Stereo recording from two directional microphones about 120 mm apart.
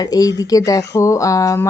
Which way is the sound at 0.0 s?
30° left (ahead or behind).